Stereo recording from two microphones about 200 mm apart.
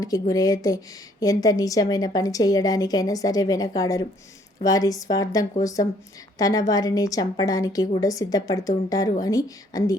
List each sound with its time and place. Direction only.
0.0 s a woman's voice: 20° left (ahead or behind)